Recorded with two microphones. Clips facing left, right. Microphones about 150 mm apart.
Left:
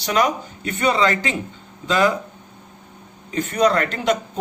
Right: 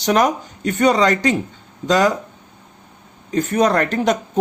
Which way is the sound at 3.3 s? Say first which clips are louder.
Right 2 dB; 45° right (ahead or behind).